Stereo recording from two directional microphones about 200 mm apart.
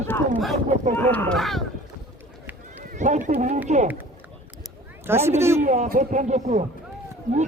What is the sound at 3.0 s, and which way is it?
Speech, 40° right (ahead or behind).